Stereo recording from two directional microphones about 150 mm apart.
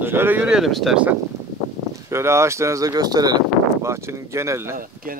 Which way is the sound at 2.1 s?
15° right (ahead or behind).